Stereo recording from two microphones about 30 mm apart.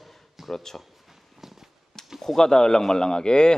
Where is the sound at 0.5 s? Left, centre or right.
Centre.